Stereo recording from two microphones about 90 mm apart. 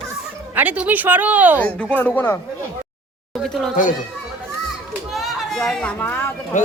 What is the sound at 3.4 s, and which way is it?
Speech, 5° left (ahead or behind).